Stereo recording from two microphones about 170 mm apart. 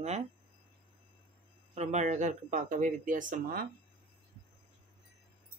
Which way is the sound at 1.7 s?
40° right (ahead or behind).